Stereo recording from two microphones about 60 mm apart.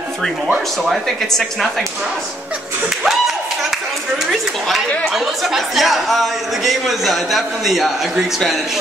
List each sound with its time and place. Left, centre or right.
0.8 s speech: centre
4.3 s speech: centre